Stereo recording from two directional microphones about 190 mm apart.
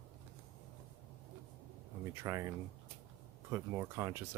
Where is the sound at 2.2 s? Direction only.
15° right (ahead or behind).